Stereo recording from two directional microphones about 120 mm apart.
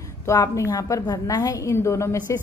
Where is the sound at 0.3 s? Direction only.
25° left (ahead or behind).